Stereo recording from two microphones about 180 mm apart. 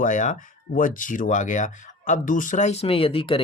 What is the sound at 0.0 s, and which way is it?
Speech, 45° left (ahead or behind).